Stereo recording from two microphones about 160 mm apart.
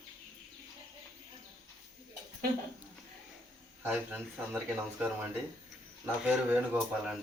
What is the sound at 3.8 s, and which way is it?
Speech, 10° right (ahead or behind).